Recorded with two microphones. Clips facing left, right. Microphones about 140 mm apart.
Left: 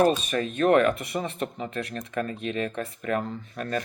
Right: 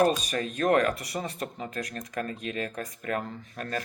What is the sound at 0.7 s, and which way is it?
Speech, 40° right (ahead or behind).